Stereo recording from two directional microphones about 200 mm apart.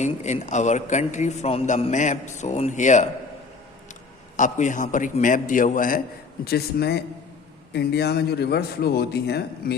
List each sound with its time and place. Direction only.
0.0 s a man's voice: 35° left (ahead or behind)
4.4 s a man's voice: 40° left (ahead or behind); by 9.7 s 55° left (ahead or behind)